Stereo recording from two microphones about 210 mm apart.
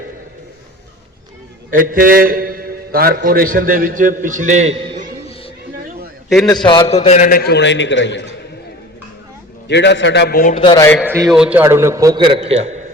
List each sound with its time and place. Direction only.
1.7 s a man's voice: 40° right (ahead or behind)
6.2 s a man's voice: centre (ahead or behind)
6.5 s a man's voice: 20° left (ahead or behind); by 8.4 s 55° left (ahead or behind)
9.6 s a man's voice: 55° left (ahead or behind)
10.6 s a man's voice: 20° left (ahead or behind)
11.0 s a man's voice: 10° right (ahead or behind); by 12.8 s 30° right (ahead or behind)